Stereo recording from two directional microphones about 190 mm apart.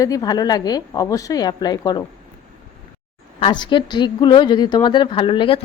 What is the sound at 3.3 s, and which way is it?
A woman's voice, 25° left (ahead or behind).